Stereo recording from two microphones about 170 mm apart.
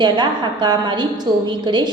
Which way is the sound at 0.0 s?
25° right (ahead or behind).